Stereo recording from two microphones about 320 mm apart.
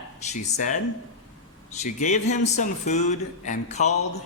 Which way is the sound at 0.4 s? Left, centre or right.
Left.